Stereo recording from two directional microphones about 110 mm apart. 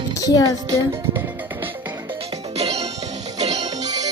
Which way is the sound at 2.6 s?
70° right (ahead or behind).